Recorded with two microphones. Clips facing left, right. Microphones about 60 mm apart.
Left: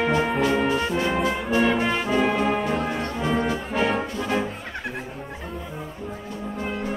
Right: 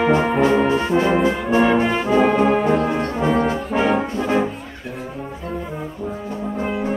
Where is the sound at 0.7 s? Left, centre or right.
Right.